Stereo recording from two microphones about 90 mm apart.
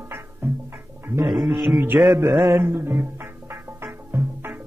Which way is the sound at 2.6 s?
25° right (ahead or behind).